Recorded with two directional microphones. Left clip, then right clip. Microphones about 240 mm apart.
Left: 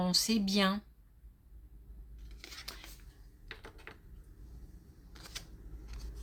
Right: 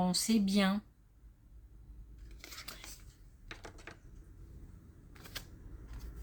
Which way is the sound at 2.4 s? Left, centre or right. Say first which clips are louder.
Left 1 dB; centre.